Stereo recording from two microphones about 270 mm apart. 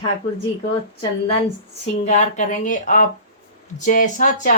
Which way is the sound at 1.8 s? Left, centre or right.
Left.